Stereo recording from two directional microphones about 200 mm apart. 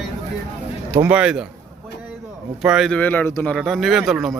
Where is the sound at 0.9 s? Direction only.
10° right (ahead or behind).